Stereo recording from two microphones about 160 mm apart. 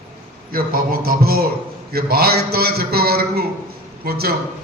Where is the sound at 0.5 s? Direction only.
65° right (ahead or behind).